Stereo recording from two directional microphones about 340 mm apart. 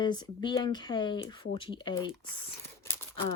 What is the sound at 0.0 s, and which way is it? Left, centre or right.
Speech, centre.